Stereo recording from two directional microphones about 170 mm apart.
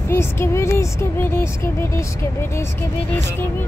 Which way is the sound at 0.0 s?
15° left (ahead or behind).